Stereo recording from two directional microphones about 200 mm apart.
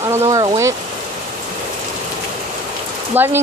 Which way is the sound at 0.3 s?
20° right (ahead or behind).